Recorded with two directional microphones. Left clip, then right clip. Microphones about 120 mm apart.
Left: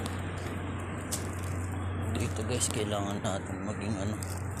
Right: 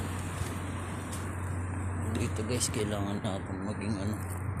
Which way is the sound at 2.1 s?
65° right (ahead or behind).